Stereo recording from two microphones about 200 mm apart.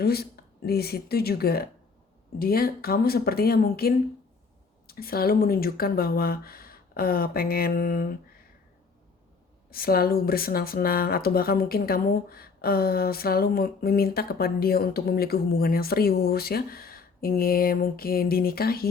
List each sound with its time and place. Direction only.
0.0 s speech: 50° left (ahead or behind)
9.6 s speech: 50° left (ahead or behind)